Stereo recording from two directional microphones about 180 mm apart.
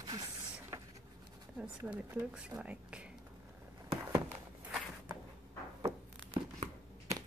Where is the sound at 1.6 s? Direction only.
5° right (ahead or behind).